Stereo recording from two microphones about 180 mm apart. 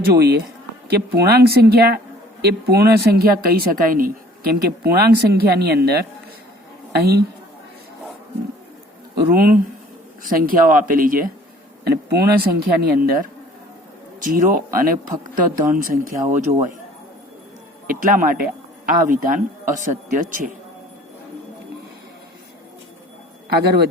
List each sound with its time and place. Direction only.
0.0 s a woman's voice: 65° right (ahead or behind)
9.3 s speech: 55° right (ahead or behind)
11.9 s a woman's voice: 60° right (ahead or behind)
17.8 s speech: 50° right (ahead or behind)
23.6 s a woman's voice: 65° right (ahead or behind)